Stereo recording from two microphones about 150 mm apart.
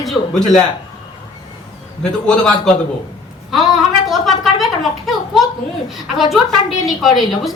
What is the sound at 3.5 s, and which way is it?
A woman's voice, centre (ahead or behind).